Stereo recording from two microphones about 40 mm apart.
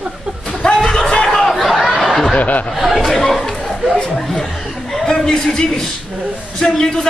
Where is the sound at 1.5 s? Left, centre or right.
Centre.